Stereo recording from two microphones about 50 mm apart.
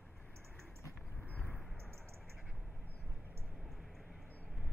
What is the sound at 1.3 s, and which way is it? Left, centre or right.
Vehicle, left.